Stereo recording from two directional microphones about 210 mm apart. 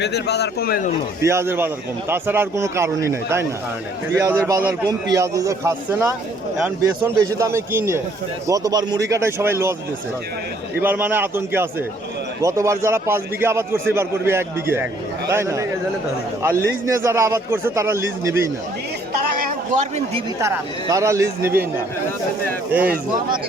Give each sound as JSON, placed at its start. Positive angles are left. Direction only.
{"t": 0.0, "sound": "a man's voice", "side_deg": 50}
{"t": 1.2, "sound": "a man's voice", "side_deg": -10}
{"t": 10.8, "sound": "a man's voice", "side_deg": -10}
{"t": 19.4, "sound": "a sound", "side_deg": -40}
{"t": 20.4, "sound": "a man's voice", "side_deg": -15}